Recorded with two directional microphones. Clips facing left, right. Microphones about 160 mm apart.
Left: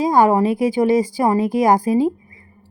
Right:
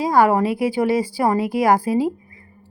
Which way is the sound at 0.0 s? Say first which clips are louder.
Left 2 dB; 20° left (ahead or behind).